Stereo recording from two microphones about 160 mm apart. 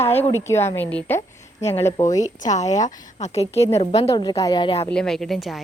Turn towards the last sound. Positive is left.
turn(degrees=0)  # may be behind; listen again after turning